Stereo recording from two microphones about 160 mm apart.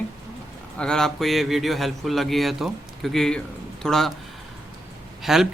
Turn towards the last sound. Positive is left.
turn(degrees=0)  # may be behind; listen again after turning